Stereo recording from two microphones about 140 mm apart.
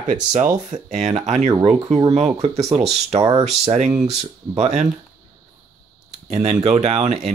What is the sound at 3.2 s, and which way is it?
Speech, 25° right (ahead or behind).